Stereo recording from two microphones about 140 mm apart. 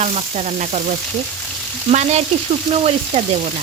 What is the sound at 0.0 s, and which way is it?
Speech, 55° right (ahead or behind).